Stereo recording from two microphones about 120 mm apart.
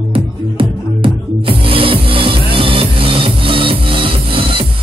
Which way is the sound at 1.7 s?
50° right (ahead or behind).